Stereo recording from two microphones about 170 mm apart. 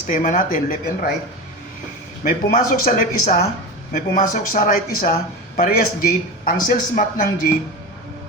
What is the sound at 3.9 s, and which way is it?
Speech, 50° left (ahead or behind).